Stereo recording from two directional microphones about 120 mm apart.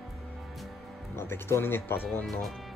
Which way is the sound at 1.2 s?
20° left (ahead or behind).